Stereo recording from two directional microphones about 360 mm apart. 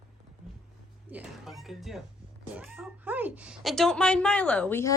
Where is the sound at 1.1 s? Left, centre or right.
Centre.